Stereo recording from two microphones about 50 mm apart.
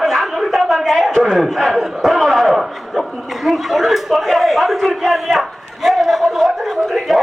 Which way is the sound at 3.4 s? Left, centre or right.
Centre.